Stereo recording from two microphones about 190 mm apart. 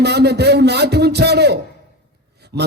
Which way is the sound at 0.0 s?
60° right (ahead or behind).